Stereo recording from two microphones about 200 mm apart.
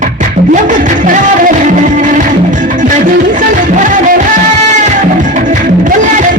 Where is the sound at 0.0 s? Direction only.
40° right (ahead or behind).